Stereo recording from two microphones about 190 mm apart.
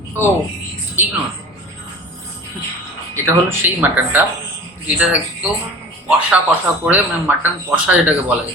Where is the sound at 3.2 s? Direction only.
10° right (ahead or behind).